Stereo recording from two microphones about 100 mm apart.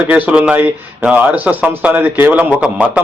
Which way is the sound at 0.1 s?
15° right (ahead or behind).